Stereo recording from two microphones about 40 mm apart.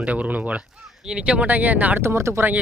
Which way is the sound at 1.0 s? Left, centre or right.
Right.